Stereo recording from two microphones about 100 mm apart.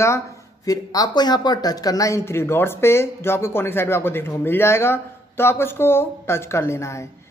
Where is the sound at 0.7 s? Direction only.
40° left (ahead or behind).